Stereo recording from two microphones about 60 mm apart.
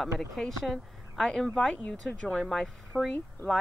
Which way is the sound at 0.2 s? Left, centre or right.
Centre.